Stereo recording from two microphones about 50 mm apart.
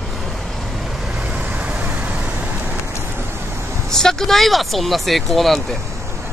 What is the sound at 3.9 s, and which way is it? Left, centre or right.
Speech, centre.